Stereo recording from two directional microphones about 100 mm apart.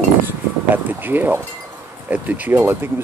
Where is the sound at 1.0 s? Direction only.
20° right (ahead or behind).